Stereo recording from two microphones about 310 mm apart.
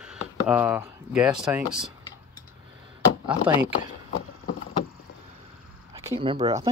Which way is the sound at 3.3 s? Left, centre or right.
Centre.